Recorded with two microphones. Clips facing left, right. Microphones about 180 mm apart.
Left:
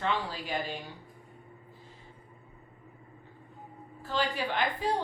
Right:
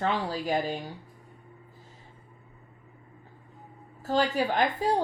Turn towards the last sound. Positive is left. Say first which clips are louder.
# right 5 dB
turn(degrees=-40)  # may be behind; listen again after turning